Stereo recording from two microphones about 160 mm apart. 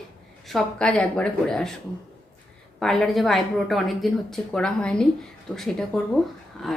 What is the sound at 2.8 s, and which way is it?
Speech, centre (ahead or behind).